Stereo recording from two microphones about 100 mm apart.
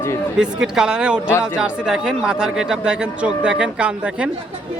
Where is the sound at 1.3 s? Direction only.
25° left (ahead or behind).